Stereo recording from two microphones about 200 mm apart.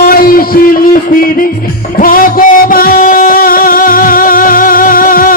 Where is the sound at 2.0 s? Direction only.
45° left (ahead or behind).